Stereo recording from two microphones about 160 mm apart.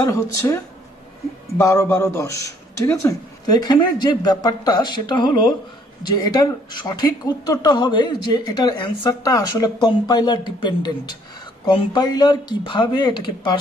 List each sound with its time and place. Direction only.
0.0 s speech: 20° left (ahead or behind)
1.6 s speech: 20° left (ahead or behind)